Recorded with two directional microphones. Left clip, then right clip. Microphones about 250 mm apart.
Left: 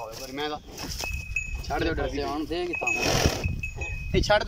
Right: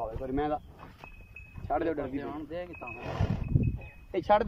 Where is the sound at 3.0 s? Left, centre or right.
Left.